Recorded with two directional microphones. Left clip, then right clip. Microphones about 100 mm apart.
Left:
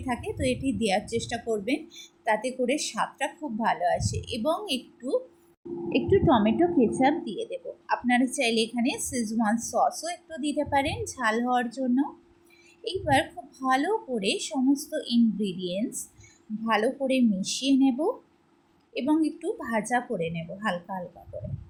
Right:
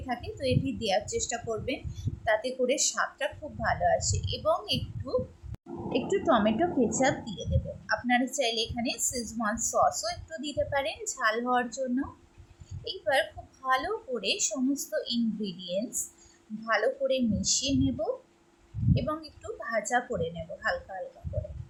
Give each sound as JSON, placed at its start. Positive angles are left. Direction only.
{"t": 0.1, "sound": "a woman's voice", "side_deg": 40}